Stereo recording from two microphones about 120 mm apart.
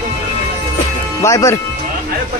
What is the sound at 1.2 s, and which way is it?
Speech, 25° left (ahead or behind).